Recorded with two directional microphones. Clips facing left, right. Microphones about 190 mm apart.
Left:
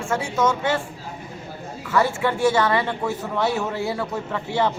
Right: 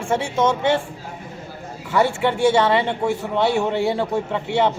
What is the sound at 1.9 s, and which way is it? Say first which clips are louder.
A man's voice: right 2 dB; 25° right (ahead or behind).